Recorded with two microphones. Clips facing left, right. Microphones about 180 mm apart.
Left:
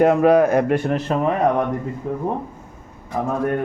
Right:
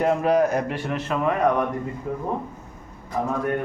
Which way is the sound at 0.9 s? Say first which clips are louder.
Left 5 dB; 35° left (ahead or behind).